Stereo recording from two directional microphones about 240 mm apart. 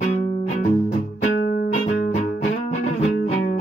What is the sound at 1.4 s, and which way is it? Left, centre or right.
Music, left.